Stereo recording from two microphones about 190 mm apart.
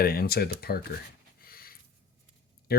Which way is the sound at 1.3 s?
50° left (ahead or behind).